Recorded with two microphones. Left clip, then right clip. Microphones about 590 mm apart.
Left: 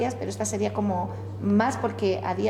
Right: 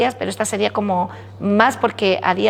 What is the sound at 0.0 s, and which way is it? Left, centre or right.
A woman's voice, right.